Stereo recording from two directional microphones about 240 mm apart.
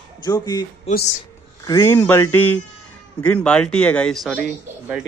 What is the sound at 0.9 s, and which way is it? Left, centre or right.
Speech, left.